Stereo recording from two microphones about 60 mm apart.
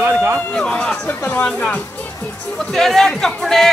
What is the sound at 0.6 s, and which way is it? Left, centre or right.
Speech, centre.